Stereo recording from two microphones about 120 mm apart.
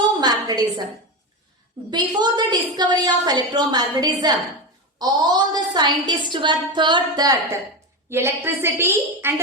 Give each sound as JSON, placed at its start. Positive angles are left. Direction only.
{"t": 0.2, "sound": "a sound", "side_deg": -35}
{"t": 1.9, "sound": "a woman's voice", "side_deg": -40}
{"t": 8.1, "sound": "a woman's voice", "side_deg": -20}